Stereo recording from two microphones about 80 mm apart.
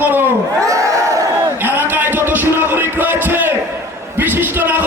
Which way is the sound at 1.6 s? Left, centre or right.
Right.